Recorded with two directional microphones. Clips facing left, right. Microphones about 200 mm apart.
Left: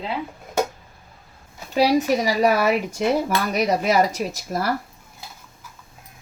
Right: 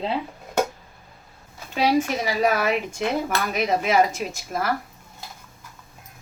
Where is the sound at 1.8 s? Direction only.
40° left (ahead or behind).